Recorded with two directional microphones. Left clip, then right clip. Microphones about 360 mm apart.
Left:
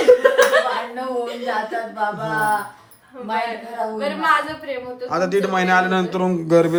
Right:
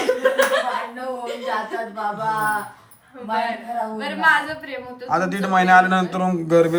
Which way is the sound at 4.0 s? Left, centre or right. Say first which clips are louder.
Right 1 dB; centre.